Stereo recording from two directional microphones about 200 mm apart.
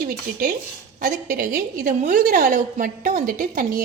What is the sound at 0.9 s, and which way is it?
A woman's voice, 45° right (ahead or behind).